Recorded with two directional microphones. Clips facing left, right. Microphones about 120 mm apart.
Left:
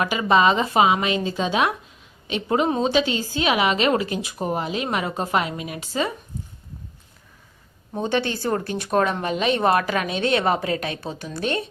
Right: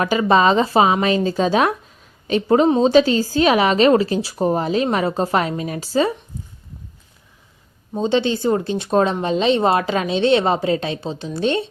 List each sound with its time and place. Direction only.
0.0 s a woman's voice: 35° right (ahead or behind)
7.9 s speech: 20° right (ahead or behind)